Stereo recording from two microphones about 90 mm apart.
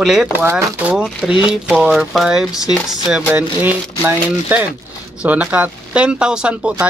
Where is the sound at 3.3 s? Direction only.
20° right (ahead or behind).